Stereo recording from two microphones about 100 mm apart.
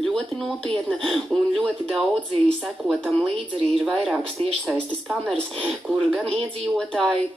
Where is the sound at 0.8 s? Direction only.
Centre (ahead or behind).